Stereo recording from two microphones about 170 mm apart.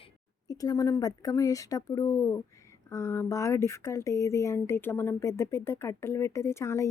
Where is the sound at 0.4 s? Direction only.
20° left (ahead or behind).